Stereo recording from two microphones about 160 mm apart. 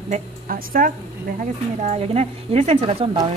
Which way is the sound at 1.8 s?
40° right (ahead or behind).